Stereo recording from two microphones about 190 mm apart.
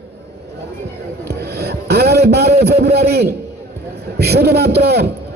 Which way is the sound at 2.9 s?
60° right (ahead or behind).